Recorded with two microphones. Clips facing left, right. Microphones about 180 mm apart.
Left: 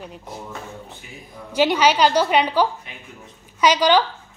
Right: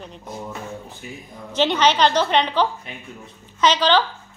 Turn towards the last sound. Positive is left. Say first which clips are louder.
# left 1 dB
turn(degrees=10)  # may be behind; listen again after turning